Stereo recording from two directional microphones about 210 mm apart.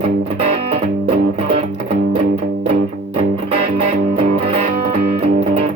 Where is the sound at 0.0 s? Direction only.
30° right (ahead or behind).